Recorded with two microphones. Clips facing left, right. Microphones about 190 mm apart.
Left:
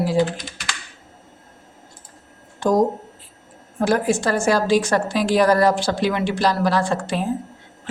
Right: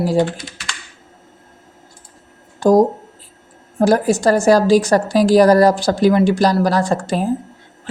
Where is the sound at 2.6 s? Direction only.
35° right (ahead or behind).